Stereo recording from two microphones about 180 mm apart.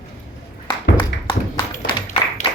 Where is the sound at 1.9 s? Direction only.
30° left (ahead or behind).